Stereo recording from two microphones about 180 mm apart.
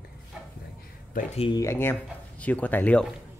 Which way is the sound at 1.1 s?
35° left (ahead or behind).